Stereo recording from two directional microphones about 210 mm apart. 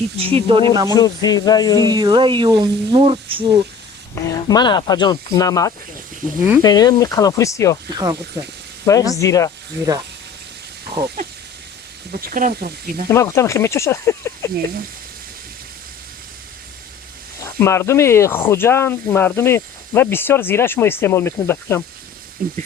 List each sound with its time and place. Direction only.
0.2 s speech: 25° right (ahead or behind)
0.9 s speech: 20° left (ahead or behind)
1.9 s speech: 20° right (ahead or behind)
4.1 s speech: 15° left (ahead or behind)
7.9 s speech: 20° right (ahead or behind)
8.8 s speech: 15° left (ahead or behind)
12.1 s speech: 40° right (ahead or behind)
13.1 s speech: 15° left (ahead or behind)
17.6 s speech: 10° left (ahead or behind)
22.4 s speech: 45° right (ahead or behind)